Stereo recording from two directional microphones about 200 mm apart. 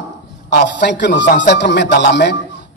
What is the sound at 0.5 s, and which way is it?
Speech, 60° left (ahead or behind).